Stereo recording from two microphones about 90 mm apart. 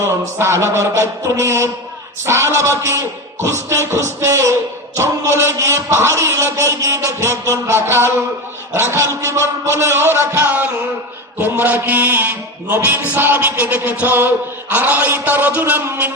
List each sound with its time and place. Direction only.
0.0 s a man's voice: 30° right (ahead or behind)